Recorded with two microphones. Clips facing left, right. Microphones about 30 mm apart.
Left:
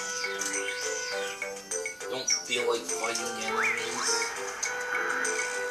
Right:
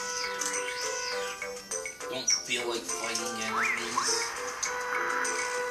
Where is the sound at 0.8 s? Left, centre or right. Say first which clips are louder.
Left 1 dB; right.